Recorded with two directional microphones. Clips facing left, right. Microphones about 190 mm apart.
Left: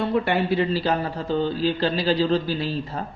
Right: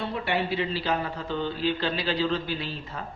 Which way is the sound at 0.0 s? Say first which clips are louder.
Left 6 dB; 50° left (ahead or behind).